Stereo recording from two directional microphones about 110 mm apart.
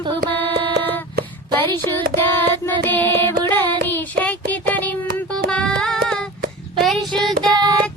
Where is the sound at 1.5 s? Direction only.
20° left (ahead or behind).